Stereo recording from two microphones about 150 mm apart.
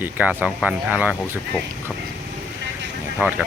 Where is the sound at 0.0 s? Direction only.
10° right (ahead or behind).